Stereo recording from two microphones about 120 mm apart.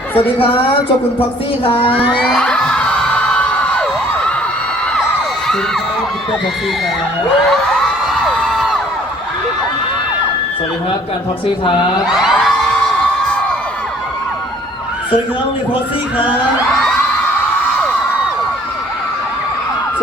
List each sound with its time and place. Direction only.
0.1 s speech: 15° left (ahead or behind)
1.7 s crowd: 50° left (ahead or behind)
2.0 s crowd: 5° right (ahead or behind)
2.4 s a sound: 10° left (ahead or behind)
8.2 s crowd: centre (ahead or behind)
11.4 s crowd: 45° left (ahead or behind)
12.0 s a sound: 5° right (ahead or behind)